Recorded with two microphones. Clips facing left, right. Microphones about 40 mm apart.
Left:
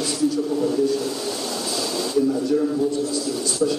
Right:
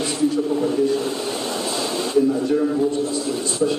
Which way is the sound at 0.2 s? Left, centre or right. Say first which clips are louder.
Right 1 dB; right.